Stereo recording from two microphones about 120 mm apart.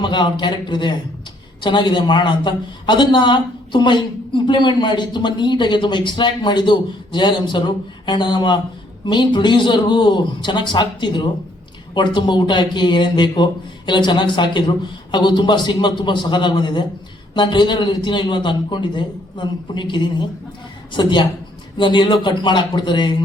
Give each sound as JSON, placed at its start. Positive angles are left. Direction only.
{"t": 0.0, "sound": "a man's voice", "side_deg": 40}